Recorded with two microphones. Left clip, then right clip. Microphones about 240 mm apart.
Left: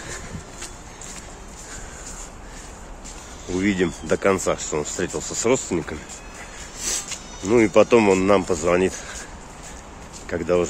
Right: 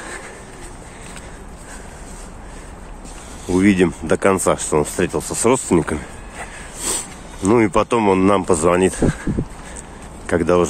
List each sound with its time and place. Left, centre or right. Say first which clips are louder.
3.5 s speech: right 7 dB; centre
10.2 s speech: right 5 dB; right